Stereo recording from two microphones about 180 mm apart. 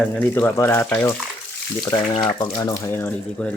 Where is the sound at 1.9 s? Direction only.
25° left (ahead or behind).